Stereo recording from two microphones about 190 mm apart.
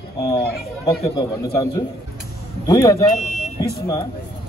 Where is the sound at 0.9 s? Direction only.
20° left (ahead or behind).